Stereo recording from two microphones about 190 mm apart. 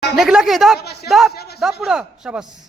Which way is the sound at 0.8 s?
60° left (ahead or behind).